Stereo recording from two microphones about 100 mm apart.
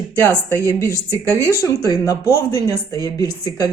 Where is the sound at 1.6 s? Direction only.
35° left (ahead or behind).